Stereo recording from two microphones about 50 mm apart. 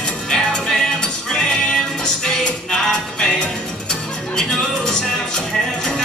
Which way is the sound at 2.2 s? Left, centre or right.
Centre.